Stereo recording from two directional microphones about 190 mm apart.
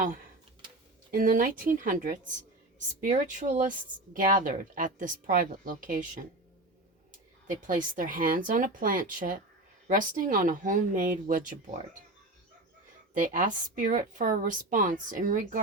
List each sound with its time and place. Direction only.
1.1 s speech: 45° right (ahead or behind)
7.5 s speech: 45° right (ahead or behind)
13.1 s speech: 45° right (ahead or behind)